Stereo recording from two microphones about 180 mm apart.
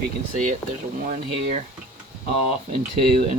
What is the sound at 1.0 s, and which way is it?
Speech, 45° right (ahead or behind).